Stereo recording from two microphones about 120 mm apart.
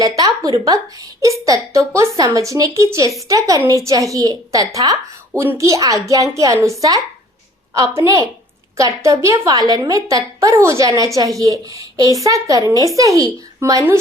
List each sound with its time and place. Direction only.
0.0 s a woman's voice: 30° right (ahead or behind)